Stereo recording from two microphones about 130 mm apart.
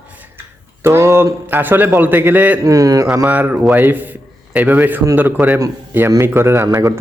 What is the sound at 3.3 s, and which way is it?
A man's voice, 10° right (ahead or behind).